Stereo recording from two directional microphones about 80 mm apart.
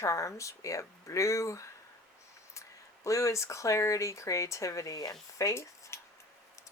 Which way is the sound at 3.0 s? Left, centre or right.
Left.